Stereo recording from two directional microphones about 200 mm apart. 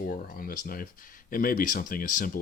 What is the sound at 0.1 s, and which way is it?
Speech, 45° left (ahead or behind).